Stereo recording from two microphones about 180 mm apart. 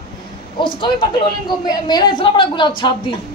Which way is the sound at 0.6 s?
25° left (ahead or behind).